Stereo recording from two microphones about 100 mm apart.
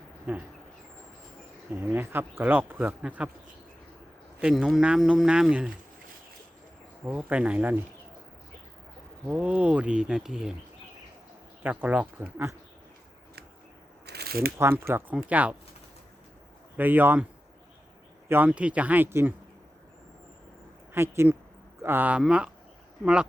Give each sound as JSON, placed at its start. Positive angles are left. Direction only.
{"t": 0.3, "sound": "speech", "side_deg": -20}
{"t": 1.7, "sound": "speech", "side_deg": -20}
{"t": 4.4, "sound": "speech", "side_deg": -5}
{"t": 7.0, "sound": "speech", "side_deg": -20}
{"t": 9.2, "sound": "speech", "side_deg": -15}
{"t": 11.6, "sound": "speech", "side_deg": -15}
{"t": 14.6, "sound": "speech", "side_deg": -25}
{"t": 15.1, "sound": "speech", "side_deg": -15}
{"t": 16.7, "sound": "speech", "side_deg": -20}
{"t": 18.3, "sound": "speech", "side_deg": -20}
{"t": 20.9, "sound": "speech", "side_deg": -25}